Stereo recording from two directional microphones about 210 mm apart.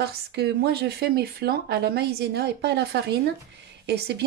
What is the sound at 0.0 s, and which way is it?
Speech, 50° right (ahead or behind).